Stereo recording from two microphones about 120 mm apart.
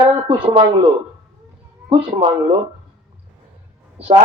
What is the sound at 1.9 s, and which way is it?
Speech, 45° right (ahead or behind).